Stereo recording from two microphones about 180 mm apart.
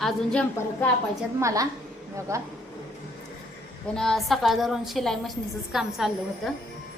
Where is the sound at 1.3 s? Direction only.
15° right (ahead or behind).